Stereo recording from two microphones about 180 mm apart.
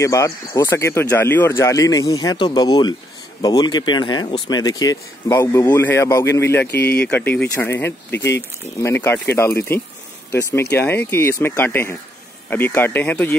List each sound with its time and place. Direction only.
0.0 s speech: 15° left (ahead or behind)
6.7 s speech: 65° left (ahead or behind)
7.0 s speech: 10° left (ahead or behind)